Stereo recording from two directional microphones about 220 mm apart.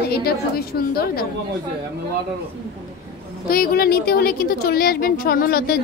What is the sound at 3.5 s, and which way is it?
A woman's voice, 45° left (ahead or behind).